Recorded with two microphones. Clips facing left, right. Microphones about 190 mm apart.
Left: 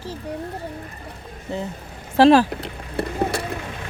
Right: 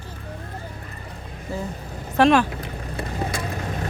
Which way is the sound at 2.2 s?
35° left (ahead or behind).